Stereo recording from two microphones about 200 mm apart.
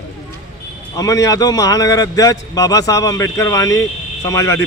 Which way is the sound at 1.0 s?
15° left (ahead or behind).